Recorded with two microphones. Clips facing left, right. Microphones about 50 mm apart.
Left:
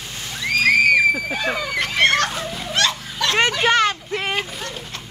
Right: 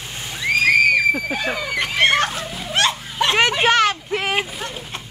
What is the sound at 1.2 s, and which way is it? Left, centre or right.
Speech, centre.